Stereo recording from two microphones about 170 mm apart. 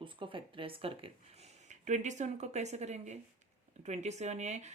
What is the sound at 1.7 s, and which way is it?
A woman's voice, 45° right (ahead or behind).